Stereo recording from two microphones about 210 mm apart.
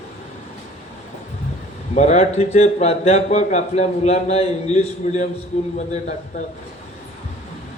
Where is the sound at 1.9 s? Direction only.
30° left (ahead or behind).